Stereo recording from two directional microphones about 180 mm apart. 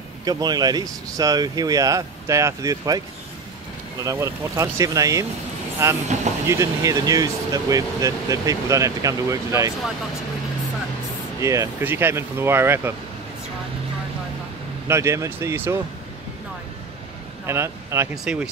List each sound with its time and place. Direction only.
0.2 s speech: 20° right (ahead or behind)
4.0 s speech: 20° right (ahead or behind)
11.4 s speech: 15° right (ahead or behind)
14.9 s speech: 15° right (ahead or behind)
17.5 s speech: 15° right (ahead or behind)
18.1 s speech: 5° right (ahead or behind)